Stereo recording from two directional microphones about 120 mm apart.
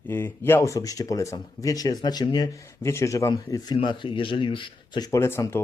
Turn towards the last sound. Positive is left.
turn(degrees=20)  # may be behind; listen again after turning